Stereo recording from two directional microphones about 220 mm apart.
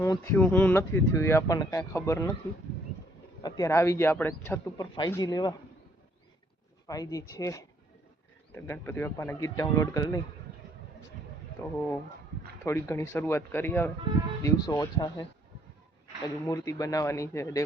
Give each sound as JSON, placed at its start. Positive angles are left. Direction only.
{"t": 0.0, "sound": "speech", "side_deg": 10}
{"t": 3.4, "sound": "speech", "side_deg": 15}
{"t": 6.8, "sound": "speech", "side_deg": 15}
{"t": 11.6, "sound": "speech", "side_deg": 10}